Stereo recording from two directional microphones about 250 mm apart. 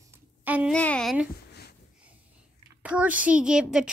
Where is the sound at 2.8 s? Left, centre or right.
Centre.